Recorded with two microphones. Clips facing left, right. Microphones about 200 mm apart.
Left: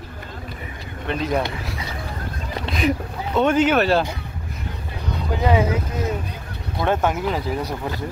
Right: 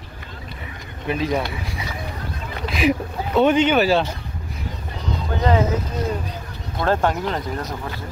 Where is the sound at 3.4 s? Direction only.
Centre (ahead or behind).